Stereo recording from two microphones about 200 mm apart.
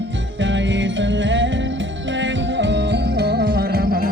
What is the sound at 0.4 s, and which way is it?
Music, 65° right (ahead or behind).